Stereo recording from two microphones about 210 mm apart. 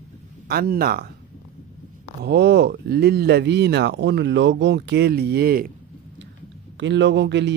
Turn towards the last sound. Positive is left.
turn(degrees=-55)  # may be behind; listen again after turning